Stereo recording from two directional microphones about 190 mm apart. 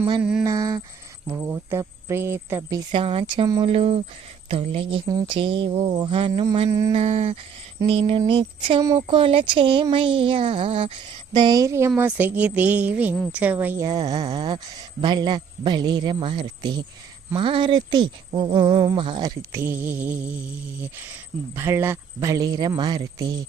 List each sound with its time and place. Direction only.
0.2 s a sound: 5° right (ahead or behind)
0.4 s speech: 20° right (ahead or behind)
3.7 s humming: 30° right (ahead or behind)
4.6 s speech: 30° right (ahead or behind)
6.9 s humming: 35° right (ahead or behind)
7.9 s speech: 30° right (ahead or behind); by 20.3 s 10° right (ahead or behind)
21.5 s speech: 10° right (ahead or behind)